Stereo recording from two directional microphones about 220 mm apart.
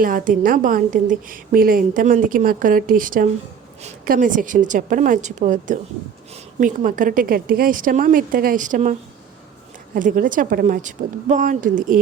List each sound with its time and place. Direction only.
0.0 s a woman's voice: 40° right (ahead or behind)